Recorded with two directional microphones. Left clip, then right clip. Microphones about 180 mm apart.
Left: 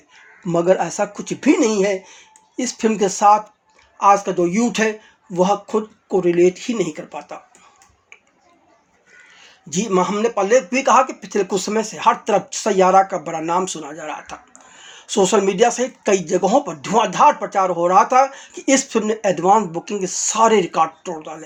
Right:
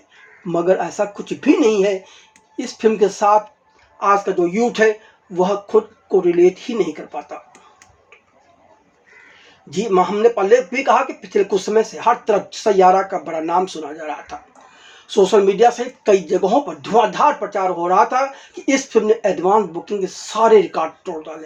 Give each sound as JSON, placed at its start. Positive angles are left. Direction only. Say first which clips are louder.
{"t": 0.4, "sound": "speech", "louder": "left 1 dB", "side_deg": 30}
{"t": 9.6, "sound": "speech", "louder": "right 2 dB", "side_deg": 40}